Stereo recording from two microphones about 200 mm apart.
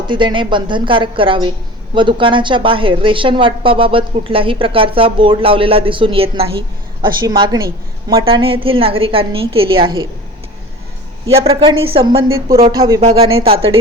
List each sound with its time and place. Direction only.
0.1 s a woman's voice: 25° right (ahead or behind)
11.3 s a woman's voice: 30° right (ahead or behind)